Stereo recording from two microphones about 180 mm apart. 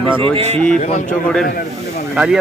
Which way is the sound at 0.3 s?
35° right (ahead or behind).